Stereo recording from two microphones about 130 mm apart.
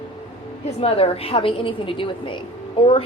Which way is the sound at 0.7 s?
50° left (ahead or behind).